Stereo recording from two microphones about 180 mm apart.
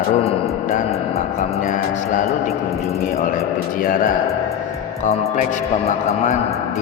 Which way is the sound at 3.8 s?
50° left (ahead or behind).